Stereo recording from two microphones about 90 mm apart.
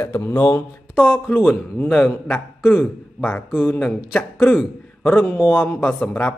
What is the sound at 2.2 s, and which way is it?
Speech, 20° left (ahead or behind).